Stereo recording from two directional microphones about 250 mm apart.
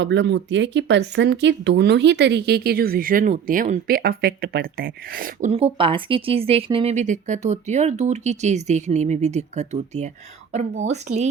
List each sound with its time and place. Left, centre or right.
0.0 s a woman's voice: right